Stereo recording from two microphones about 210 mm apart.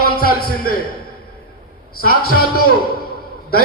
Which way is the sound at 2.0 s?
45° left (ahead or behind).